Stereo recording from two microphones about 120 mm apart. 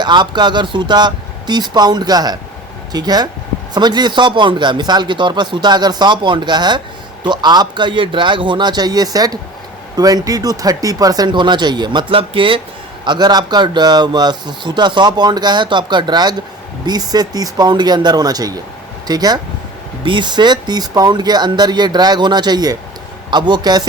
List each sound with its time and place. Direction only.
0.0 s speech: 40° right (ahead or behind)
13.1 s speech: 35° right (ahead or behind)